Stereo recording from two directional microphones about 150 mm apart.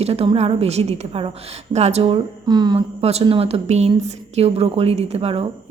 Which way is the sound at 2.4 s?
30° right (ahead or behind).